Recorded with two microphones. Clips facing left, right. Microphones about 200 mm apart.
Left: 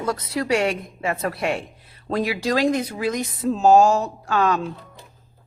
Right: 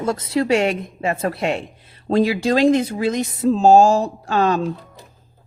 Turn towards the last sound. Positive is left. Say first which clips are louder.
# right 3 dB
turn(degrees=-30)  # may be behind; listen again after turning